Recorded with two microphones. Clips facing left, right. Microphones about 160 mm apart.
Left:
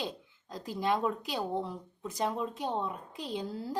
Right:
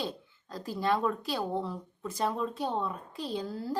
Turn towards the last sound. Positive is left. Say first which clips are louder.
# right 2 dB
turn(degrees=20)  # may be behind; listen again after turning